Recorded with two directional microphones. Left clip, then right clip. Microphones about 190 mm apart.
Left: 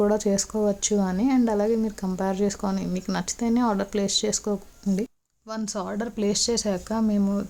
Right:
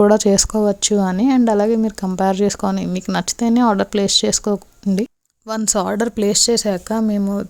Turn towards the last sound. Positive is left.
turn(degrees=-35)  # may be behind; listen again after turning